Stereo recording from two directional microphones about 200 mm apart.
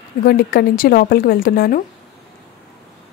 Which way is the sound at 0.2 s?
50° left (ahead or behind).